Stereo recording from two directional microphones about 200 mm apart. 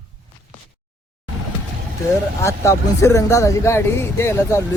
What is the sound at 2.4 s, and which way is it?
Speech, 15° left (ahead or behind).